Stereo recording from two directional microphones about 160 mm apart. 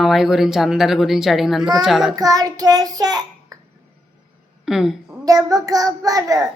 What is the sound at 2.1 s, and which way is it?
A child's voice, 25° right (ahead or behind).